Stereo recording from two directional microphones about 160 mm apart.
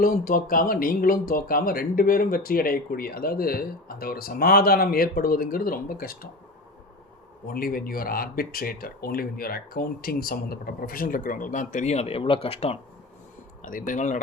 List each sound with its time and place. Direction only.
0.0 s speech: 60° left (ahead or behind)
7.4 s speech: 65° left (ahead or behind); by 12.7 s 40° left (ahead or behind)
13.6 s speech: 60° left (ahead or behind)